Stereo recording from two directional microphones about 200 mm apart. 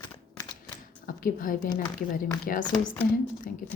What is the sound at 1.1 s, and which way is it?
A woman's voice, 45° left (ahead or behind).